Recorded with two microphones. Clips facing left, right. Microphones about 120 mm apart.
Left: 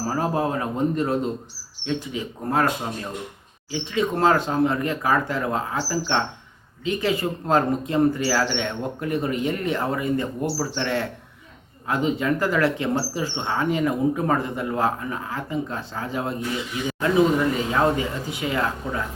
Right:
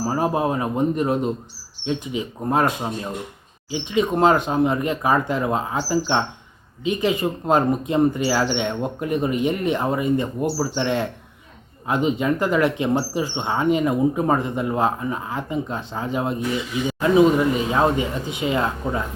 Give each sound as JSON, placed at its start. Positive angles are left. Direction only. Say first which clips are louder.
{"t": 0.0, "sound": "speech", "louder": "right 2 dB", "side_deg": -15}